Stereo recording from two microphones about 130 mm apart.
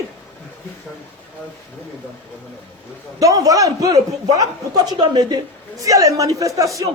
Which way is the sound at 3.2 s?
25° right (ahead or behind).